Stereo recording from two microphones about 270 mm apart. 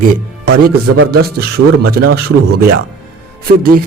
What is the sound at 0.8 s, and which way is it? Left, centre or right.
A man's voice, right.